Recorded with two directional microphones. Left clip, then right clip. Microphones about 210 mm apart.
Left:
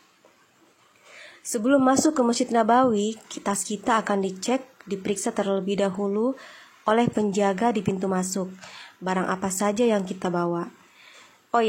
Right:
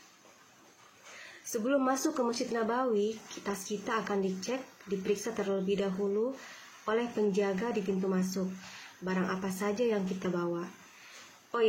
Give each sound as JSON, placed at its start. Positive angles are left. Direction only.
{"t": 1.5, "sound": "a woman's voice", "side_deg": 45}